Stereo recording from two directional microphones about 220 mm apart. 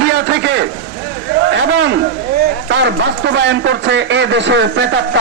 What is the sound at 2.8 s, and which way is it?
A man's voice, 55° right (ahead or behind).